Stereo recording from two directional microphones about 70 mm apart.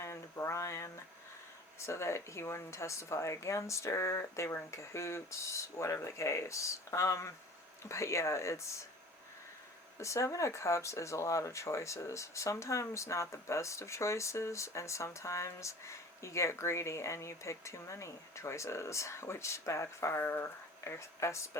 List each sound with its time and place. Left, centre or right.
0.0 s speech: left
10.0 s speech: left
20.8 s speech: left